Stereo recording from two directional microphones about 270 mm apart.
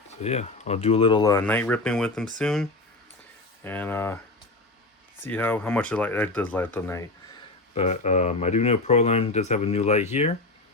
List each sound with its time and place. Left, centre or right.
0.1 s speech: left; by 4.2 s centre
5.2 s speech: centre
7.7 s speech: left